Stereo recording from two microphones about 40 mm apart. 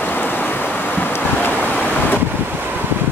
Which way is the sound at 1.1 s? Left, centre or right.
Left.